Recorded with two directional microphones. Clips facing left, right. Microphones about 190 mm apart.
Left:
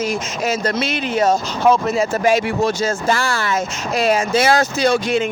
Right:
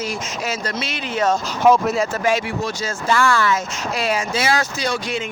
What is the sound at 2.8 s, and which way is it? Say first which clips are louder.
Speech: left 1 dB; 40° left (ahead or behind).